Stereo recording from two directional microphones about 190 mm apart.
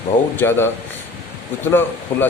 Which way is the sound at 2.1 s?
10° left (ahead or behind).